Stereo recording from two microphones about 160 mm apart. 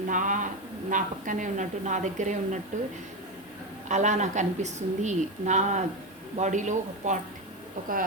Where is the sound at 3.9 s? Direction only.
45° right (ahead or behind).